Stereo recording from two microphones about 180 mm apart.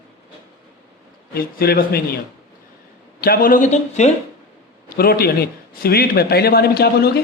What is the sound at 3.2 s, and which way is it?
Speech, 55° left (ahead or behind).